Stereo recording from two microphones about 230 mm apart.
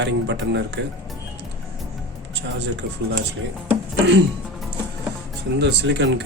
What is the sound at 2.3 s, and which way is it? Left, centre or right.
Speech, right.